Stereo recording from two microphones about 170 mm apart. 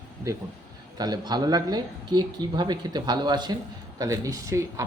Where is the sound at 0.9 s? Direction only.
25° right (ahead or behind).